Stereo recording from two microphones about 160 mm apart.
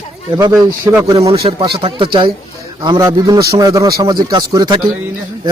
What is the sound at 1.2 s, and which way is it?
A man's voice, 35° right (ahead or behind).